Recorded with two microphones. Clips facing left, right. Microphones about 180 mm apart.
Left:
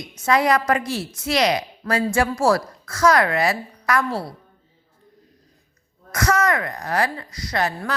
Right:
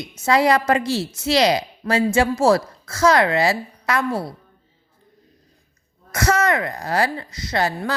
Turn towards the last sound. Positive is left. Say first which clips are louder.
# right 2 dB
turn(degrees=-30)  # may be behind; listen again after turning